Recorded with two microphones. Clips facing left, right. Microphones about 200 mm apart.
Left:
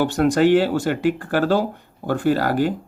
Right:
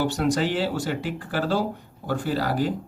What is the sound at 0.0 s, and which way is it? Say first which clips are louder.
Speech: left 6 dB; 55° left (ahead or behind).